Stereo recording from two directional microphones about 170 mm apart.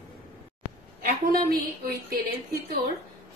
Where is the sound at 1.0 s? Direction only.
60° right (ahead or behind).